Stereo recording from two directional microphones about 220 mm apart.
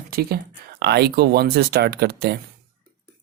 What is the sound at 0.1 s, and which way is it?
Speech, 45° right (ahead or behind).